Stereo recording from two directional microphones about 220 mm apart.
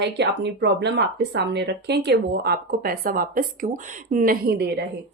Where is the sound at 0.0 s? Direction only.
50° right (ahead or behind).